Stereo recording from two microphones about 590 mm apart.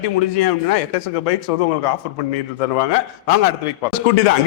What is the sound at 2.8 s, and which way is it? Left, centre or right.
Speech, left.